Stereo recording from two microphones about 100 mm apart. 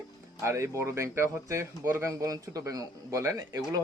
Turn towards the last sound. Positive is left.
turn(degrees=-30)  # may be behind; listen again after turning